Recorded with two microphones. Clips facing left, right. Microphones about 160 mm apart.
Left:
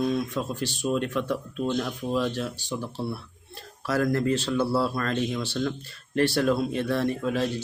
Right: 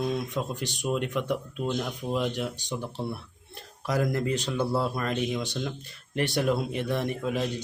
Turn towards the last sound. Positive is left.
turn(degrees=-15)  # may be behind; listen again after turning